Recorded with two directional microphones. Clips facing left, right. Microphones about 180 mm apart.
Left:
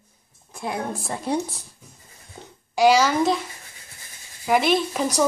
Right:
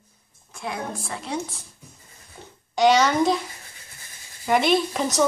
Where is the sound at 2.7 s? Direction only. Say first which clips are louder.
Left 1 dB; 5° left (ahead or behind).